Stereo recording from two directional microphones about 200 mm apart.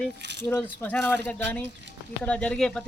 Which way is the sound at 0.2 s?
60° right (ahead or behind).